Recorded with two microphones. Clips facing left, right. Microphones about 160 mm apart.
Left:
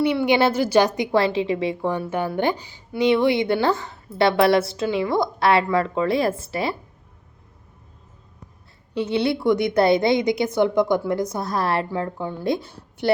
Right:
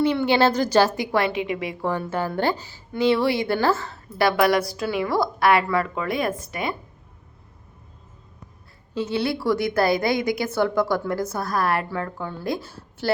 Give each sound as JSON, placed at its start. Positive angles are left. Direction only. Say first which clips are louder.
{"t": 0.0, "sound": "a woman's voice", "louder": "left 1 dB", "side_deg": 10}
{"t": 0.9, "sound": "a woman's voice", "louder": "left 3 dB", "side_deg": 25}
{"t": 1.9, "sound": "a woman's voice", "louder": "left 1 dB", "side_deg": 15}
{"t": 9.0, "sound": "a woman's voice", "louder": "left 3 dB", "side_deg": 20}